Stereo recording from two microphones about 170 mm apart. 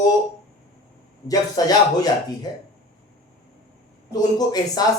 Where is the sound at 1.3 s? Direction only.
20° left (ahead or behind).